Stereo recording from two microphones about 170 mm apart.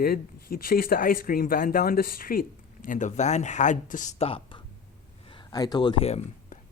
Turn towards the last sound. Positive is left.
turn(degrees=40)  # may be behind; listen again after turning